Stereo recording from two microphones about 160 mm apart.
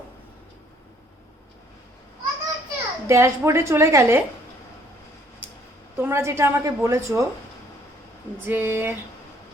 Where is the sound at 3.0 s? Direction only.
15° right (ahead or behind).